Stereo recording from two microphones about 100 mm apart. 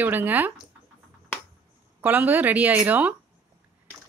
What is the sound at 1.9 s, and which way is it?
Speech, 20° right (ahead or behind).